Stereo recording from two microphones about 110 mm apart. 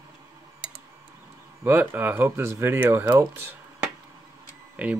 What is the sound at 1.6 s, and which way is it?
Speech, 15° right (ahead or behind).